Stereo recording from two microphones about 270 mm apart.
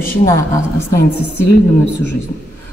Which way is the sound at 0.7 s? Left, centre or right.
Left.